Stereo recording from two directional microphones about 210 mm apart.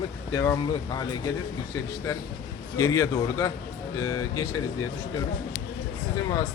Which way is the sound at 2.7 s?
15° left (ahead or behind).